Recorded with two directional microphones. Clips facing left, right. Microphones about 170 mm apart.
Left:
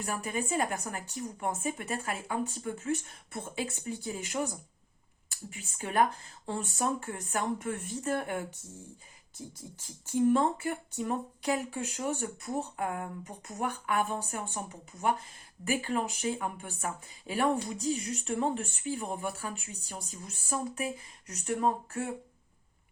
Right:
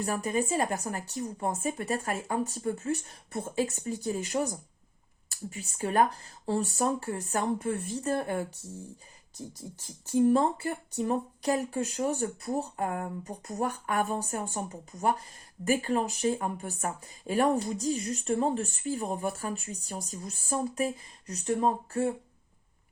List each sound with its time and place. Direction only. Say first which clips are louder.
0.0 s speech: right 5 dB; 35° right (ahead or behind)
15.6 s speech: right 4 dB; 40° right (ahead or behind)